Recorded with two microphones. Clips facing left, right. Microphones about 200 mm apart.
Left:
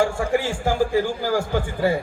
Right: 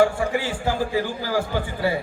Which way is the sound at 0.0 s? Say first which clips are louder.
Right 1 dB; 45° left (ahead or behind).